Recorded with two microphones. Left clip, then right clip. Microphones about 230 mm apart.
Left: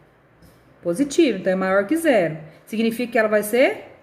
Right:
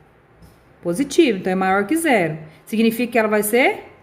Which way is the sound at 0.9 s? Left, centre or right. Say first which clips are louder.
Right 2 dB; right.